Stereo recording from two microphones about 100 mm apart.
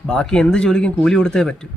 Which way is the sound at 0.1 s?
5° left (ahead or behind).